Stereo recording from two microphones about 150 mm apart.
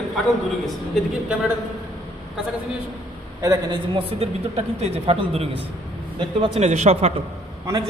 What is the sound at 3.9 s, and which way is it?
Speech, 40° right (ahead or behind).